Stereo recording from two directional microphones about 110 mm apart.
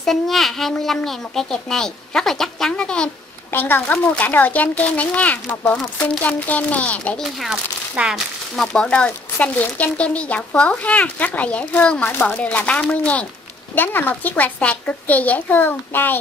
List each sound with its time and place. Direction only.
0.0 s a woman's voice: centre (ahead or behind)
7.3 s speech: 5° right (ahead or behind)
8.5 s speech: 5° left (ahead or behind)